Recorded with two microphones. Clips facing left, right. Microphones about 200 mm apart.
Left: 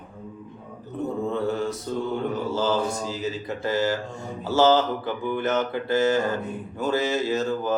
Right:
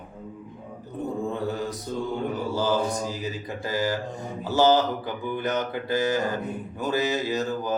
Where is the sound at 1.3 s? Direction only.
15° right (ahead or behind).